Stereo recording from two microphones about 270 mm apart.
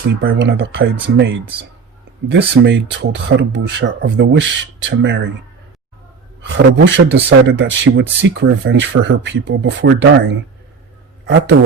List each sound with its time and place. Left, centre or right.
0.2 s speech: right
6.4 s speech: right